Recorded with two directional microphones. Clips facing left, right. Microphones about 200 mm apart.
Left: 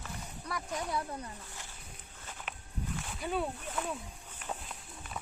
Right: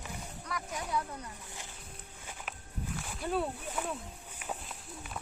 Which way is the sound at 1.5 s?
15° right (ahead or behind).